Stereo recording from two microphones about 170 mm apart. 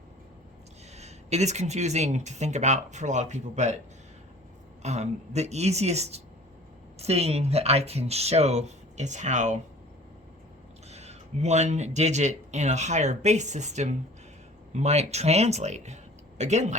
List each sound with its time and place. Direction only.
0.9 s speech: 40° right (ahead or behind)
4.8 s speech: 40° right (ahead or behind)
10.8 s speech: 40° right (ahead or behind)